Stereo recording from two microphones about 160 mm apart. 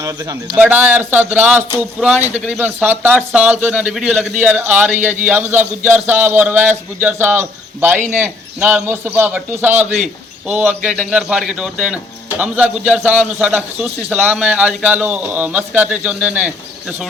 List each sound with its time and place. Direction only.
0.0 s speech: 20° right (ahead or behind)
0.5 s a man's voice: 10° right (ahead or behind)
9.7 s a man's voice: 45° right (ahead or behind)
10.4 s a man's voice: 10° right (ahead or behind)